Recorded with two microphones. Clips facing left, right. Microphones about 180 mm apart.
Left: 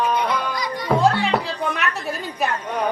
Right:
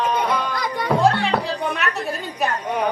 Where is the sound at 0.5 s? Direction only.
55° right (ahead or behind).